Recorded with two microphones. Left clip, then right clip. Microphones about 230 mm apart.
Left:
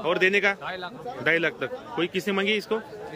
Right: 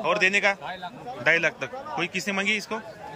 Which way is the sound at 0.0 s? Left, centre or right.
Centre.